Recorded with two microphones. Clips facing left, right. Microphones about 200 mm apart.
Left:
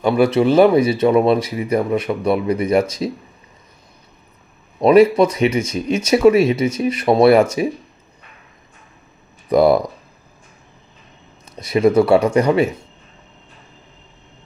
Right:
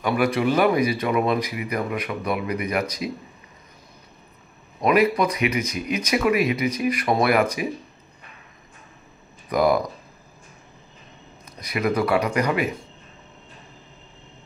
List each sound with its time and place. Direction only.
0.0 s speech: 25° left (ahead or behind)
4.7 s speech: 30° left (ahead or behind)
9.5 s speech: 30° left (ahead or behind)
11.6 s speech: 30° left (ahead or behind)